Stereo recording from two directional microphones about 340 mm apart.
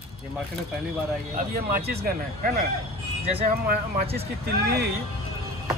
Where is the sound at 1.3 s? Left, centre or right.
Right.